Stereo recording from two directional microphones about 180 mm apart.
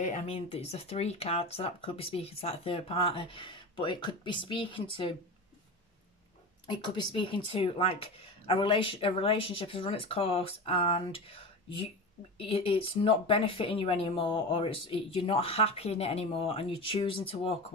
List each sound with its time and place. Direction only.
0.0 s speech: 40° left (ahead or behind)
6.6 s speech: 25° left (ahead or behind)